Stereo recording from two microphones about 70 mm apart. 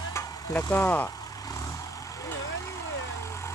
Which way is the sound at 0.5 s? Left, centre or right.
Left.